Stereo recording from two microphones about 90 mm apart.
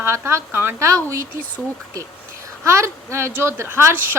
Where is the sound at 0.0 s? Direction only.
30° right (ahead or behind).